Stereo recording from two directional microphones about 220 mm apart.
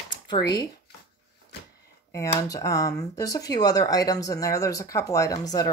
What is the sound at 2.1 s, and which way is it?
Speech, 15° left (ahead or behind).